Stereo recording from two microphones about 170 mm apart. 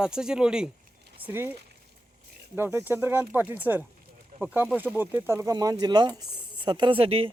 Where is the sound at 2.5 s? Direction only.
15° right (ahead or behind); by 7.3 s 35° right (ahead or behind).